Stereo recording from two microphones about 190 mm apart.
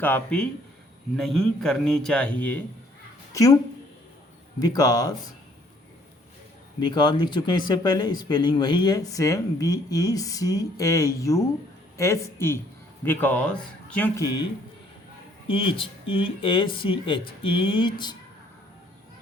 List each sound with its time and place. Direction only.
0.0 s a man's voice: 5° left (ahead or behind)
4.6 s speech: 20° left (ahead or behind)
6.7 s a man's voice: 25° left (ahead or behind); by 14.1 s 5° left (ahead or behind)
15.4 s speech: 25° left (ahead or behind)